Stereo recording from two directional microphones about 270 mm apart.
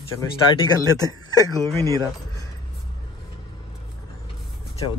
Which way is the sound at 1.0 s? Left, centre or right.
Centre.